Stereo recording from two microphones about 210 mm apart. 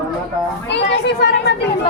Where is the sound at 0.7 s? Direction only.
55° left (ahead or behind).